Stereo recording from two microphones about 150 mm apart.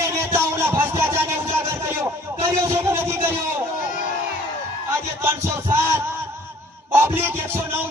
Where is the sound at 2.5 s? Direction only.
20° right (ahead or behind).